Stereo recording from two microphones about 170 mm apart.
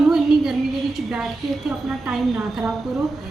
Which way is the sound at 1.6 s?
Centre (ahead or behind).